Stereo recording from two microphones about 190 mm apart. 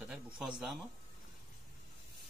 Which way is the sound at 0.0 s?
5° right (ahead or behind).